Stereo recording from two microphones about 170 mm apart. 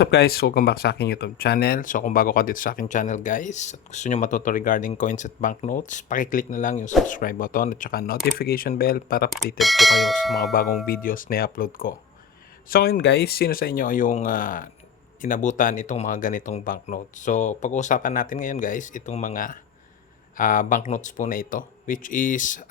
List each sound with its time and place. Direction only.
0.0 s speech: 75° left (ahead or behind); by 9.3 s 60° left (ahead or behind)
9.6 s speech: centre (ahead or behind)
11.0 s speech: 55° left (ahead or behind)